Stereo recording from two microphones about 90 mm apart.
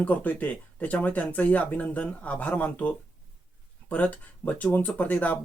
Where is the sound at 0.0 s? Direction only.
15° left (ahead or behind).